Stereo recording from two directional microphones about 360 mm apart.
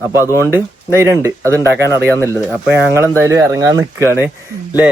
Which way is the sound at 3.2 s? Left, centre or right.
Centre.